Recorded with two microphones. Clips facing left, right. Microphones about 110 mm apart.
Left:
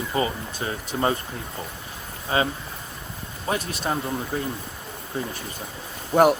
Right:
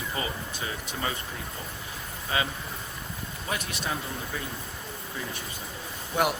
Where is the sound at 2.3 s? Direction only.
30° left (ahead or behind).